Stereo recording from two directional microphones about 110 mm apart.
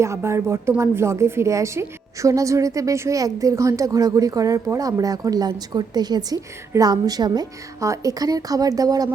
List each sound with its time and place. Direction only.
0.0 s a woman's voice: 25° right (ahead or behind)